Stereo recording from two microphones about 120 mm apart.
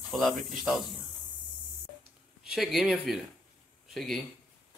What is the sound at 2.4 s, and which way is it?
Speech, 5° right (ahead or behind).